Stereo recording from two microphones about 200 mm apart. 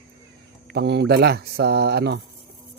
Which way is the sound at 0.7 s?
55° right (ahead or behind).